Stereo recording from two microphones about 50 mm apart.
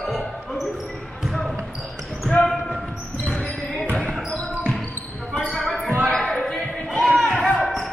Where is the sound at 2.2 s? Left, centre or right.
Centre.